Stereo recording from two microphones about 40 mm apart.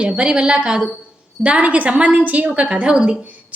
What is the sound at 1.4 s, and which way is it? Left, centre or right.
A woman's voice, right.